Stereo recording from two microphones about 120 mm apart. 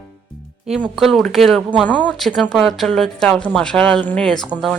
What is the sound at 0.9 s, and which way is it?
Speech, centre (ahead or behind).